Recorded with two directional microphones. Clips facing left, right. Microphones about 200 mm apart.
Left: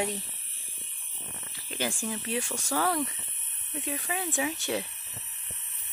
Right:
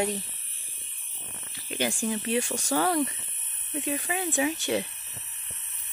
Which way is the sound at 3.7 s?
5° right (ahead or behind).